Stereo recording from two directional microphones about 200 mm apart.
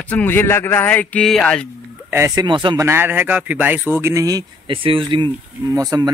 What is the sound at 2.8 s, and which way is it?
Speech, 10° right (ahead or behind).